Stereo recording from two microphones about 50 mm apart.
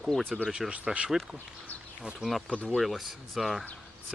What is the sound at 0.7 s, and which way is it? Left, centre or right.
Speech, right.